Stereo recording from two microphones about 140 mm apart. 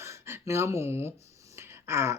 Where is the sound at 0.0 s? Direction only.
20° right (ahead or behind).